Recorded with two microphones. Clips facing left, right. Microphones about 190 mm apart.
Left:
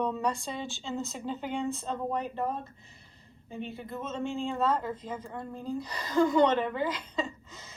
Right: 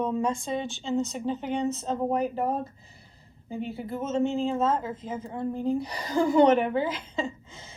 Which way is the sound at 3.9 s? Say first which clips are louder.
Right 8 dB; 25° right (ahead or behind).